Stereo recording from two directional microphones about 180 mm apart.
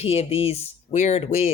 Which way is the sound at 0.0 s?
35° left (ahead or behind).